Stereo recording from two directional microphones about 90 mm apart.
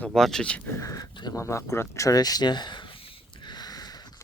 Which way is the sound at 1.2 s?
40° left (ahead or behind).